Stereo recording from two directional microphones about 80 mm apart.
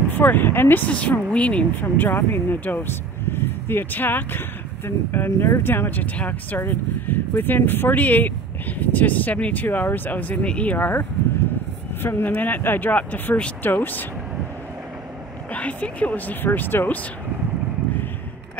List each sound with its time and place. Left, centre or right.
0.1 s speech: left
15.5 s speech: centre